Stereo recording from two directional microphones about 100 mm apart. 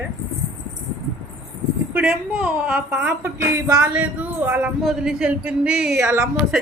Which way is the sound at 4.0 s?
15° right (ahead or behind).